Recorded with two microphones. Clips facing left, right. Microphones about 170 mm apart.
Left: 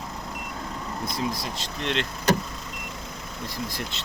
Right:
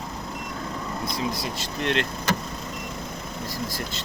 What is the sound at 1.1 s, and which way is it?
Speech, centre (ahead or behind).